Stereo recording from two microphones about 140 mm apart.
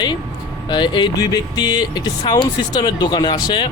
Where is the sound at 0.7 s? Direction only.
30° left (ahead or behind).